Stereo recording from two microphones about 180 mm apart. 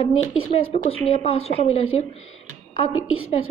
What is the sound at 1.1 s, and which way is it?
A woman's voice, 35° left (ahead or behind).